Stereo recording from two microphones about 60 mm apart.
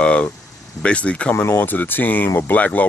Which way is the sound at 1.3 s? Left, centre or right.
Left.